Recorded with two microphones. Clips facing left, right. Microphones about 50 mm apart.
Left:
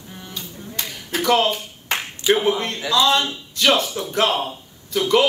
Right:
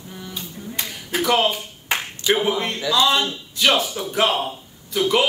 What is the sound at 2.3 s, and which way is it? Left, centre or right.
Speech, centre.